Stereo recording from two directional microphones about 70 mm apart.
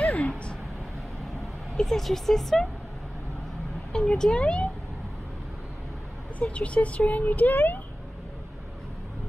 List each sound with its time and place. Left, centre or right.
0.0 s a sound: centre
1.2 s speech: centre
3.9 s speech: centre
6.4 s speech: centre